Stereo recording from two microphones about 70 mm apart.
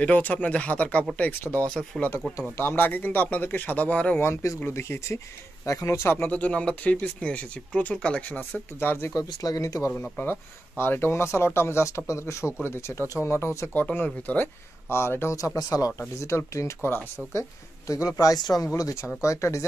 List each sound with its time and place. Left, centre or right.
0.0 s speech: left
4.2 s speech: left; by 8.4 s centre
8.4 s speech: left
9.1 s speech: left
10.8 s speech: left
13.7 s speech: left
14.9 s speech: left
15.5 s speech: left
16.0 s speech: left
18.8 s speech: left